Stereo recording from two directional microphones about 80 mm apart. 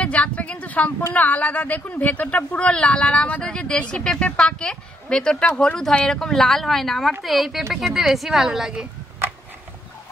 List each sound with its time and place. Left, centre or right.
0.0 s speech: centre